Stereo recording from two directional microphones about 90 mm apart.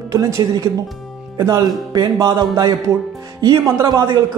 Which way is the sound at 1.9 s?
45° right (ahead or behind).